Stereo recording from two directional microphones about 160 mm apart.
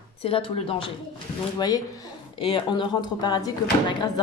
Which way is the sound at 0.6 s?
35° left (ahead or behind).